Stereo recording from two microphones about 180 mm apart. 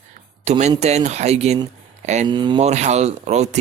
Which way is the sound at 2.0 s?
40° right (ahead or behind).